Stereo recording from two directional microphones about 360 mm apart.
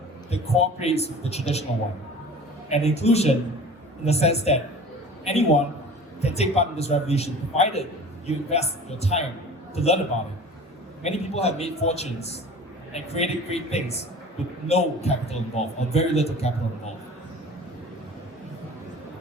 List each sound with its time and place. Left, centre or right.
0.3 s a man's voice: centre
2.6 s a man's voice: centre
11.0 s a man's voice: centre